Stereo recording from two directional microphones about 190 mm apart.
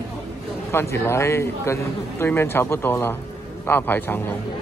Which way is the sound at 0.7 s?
15° left (ahead or behind).